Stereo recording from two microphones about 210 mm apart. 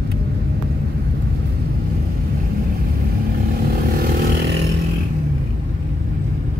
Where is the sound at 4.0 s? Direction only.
45° right (ahead or behind).